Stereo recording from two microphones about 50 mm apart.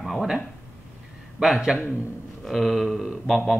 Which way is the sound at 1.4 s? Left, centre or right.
Centre.